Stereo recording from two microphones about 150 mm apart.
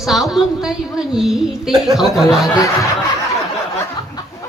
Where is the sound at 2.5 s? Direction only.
20° left (ahead or behind).